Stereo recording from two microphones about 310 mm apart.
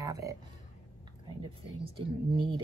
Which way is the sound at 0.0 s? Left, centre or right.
Centre.